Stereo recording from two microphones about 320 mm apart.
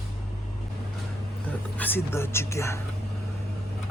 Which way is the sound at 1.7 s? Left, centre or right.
Centre.